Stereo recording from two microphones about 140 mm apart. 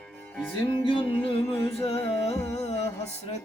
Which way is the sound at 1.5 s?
45° left (ahead or behind).